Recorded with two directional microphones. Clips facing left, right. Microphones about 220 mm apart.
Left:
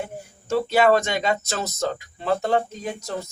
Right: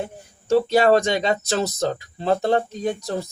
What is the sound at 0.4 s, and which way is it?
Speech, 35° right (ahead or behind).